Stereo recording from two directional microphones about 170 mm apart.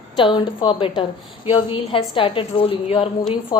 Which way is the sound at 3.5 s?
20° left (ahead or behind).